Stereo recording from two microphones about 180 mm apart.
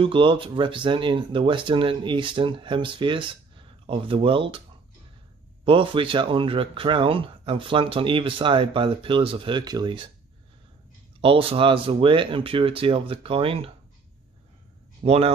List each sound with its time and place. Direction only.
0.0 s speech: 30° right (ahead or behind)
5.7 s speech: 30° right (ahead or behind)
11.1 s speech: 30° right (ahead or behind)
15.0 s speech: 30° right (ahead or behind)